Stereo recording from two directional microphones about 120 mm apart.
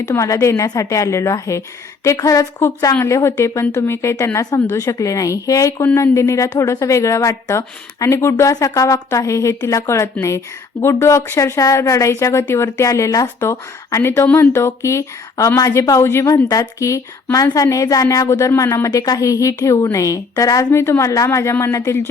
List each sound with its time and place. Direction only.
0.1 s a woman's voice: 25° left (ahead or behind)